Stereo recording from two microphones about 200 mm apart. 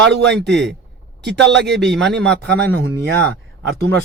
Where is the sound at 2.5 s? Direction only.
60° right (ahead or behind).